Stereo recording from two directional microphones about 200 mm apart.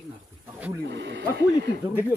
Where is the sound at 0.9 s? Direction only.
60° right (ahead or behind).